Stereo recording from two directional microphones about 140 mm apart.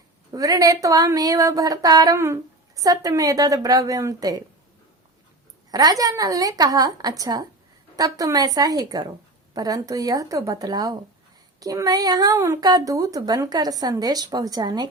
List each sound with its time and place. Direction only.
0.3 s speech: 25° right (ahead or behind)
5.7 s speech: 25° right (ahead or behind)